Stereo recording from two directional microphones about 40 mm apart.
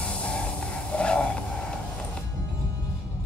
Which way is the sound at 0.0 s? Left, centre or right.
Left.